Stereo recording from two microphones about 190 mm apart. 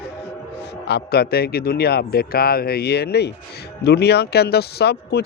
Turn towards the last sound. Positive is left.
turn(degrees=60)  # may be behind; listen again after turning